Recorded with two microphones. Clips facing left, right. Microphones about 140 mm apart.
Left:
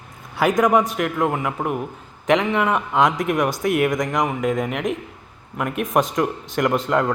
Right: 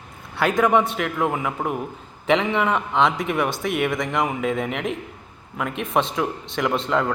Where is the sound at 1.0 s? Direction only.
Centre (ahead or behind).